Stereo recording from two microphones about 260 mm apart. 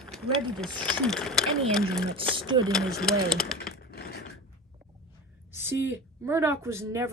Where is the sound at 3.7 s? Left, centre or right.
Left.